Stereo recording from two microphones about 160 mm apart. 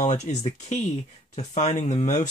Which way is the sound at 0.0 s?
50° left (ahead or behind).